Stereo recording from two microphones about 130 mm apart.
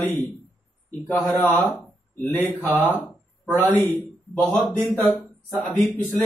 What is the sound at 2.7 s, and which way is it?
Speech, 15° left (ahead or behind).